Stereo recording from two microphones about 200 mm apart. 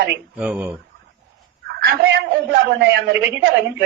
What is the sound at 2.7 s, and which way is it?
Speech, 60° right (ahead or behind).